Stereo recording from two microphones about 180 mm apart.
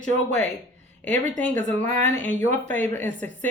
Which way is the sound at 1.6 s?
40° right (ahead or behind).